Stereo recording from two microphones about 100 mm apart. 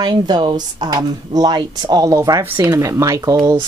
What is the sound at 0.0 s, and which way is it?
Speech, 45° right (ahead or behind).